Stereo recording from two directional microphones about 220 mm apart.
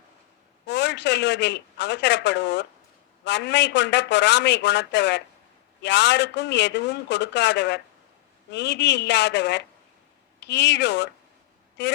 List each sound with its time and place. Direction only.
0.7 s a man's voice: 50° left (ahead or behind)